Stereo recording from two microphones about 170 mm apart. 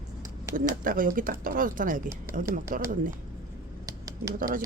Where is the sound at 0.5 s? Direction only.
55° right (ahead or behind).